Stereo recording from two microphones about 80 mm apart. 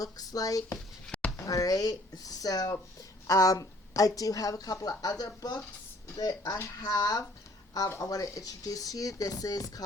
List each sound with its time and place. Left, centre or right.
0.0 s a woman's voice: left